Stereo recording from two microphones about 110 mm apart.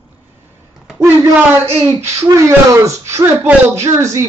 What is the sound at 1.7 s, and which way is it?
A man's voice, 25° right (ahead or behind).